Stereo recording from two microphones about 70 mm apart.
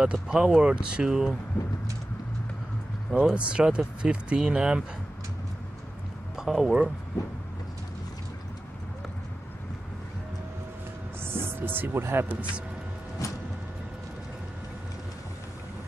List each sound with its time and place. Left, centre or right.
0.0 s speech: centre
3.1 s speech: centre
6.3 s speech: centre
11.2 s speech: right
13.2 s vehicle: left